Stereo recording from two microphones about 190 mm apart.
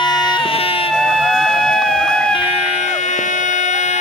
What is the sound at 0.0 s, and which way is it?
Baby cry, 25° left (ahead or behind).